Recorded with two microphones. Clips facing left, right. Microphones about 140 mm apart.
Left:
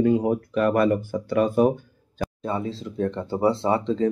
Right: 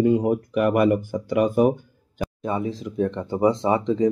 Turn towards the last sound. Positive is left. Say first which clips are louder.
# right 2 dB
turn(degrees=-15)  # may be behind; listen again after turning